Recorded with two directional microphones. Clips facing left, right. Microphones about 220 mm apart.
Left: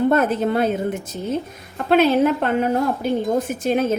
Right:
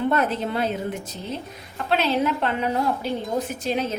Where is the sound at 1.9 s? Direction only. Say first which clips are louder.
Left 7 dB; 50° left (ahead or behind).